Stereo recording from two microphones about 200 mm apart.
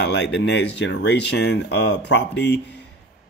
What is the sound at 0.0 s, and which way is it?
Speech, 60° left (ahead or behind).